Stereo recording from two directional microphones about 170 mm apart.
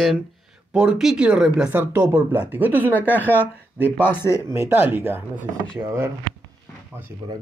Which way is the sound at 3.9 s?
10° left (ahead or behind).